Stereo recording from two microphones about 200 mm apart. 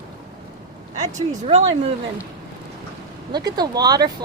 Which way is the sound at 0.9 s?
35° right (ahead or behind).